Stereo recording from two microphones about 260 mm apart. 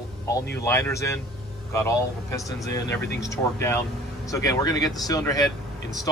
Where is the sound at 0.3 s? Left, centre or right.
Centre.